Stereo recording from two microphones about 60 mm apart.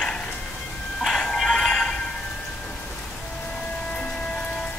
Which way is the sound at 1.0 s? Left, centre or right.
Centre.